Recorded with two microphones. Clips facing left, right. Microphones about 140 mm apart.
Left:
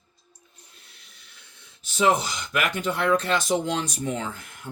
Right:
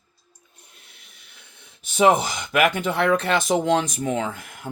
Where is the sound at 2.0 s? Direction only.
55° right (ahead or behind).